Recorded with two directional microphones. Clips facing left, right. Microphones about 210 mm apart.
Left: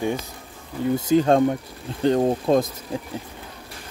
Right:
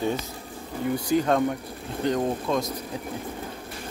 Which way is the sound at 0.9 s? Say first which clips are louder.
Left 5 dB; 25° left (ahead or behind).